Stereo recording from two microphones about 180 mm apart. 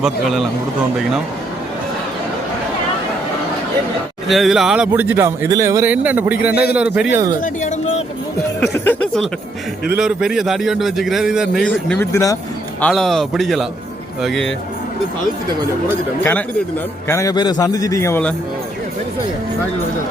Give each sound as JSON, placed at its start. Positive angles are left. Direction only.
{"t": 0.0, "sound": "a man's voice", "side_deg": 0}
{"t": 4.3, "sound": "a man's voice", "side_deg": 0}
{"t": 6.5, "sound": "a man's voice", "side_deg": 60}
{"t": 6.7, "sound": "a man's voice", "side_deg": -5}
{"t": 7.4, "sound": "a sound", "side_deg": 40}
{"t": 8.7, "sound": "a man's voice", "side_deg": 10}
{"t": 12.8, "sound": "a man's voice", "side_deg": 0}
{"t": 17.1, "sound": "a man's voice", "side_deg": 20}